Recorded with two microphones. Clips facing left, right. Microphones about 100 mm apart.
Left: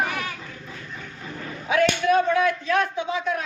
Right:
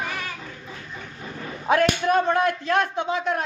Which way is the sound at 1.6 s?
45° right (ahead or behind).